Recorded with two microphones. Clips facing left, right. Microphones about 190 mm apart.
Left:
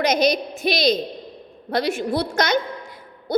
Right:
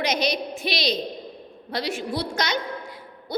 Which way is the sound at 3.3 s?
45° left (ahead or behind).